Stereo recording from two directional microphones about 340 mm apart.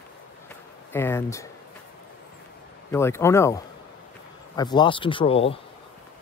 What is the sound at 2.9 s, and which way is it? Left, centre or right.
Speech, centre.